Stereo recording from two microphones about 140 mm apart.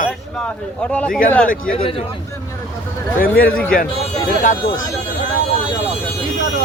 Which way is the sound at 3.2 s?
90° left.